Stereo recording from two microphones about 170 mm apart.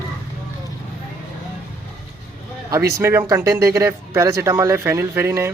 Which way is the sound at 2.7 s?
15° right (ahead or behind).